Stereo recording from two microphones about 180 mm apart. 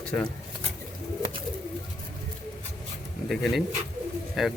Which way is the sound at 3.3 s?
Centre (ahead or behind).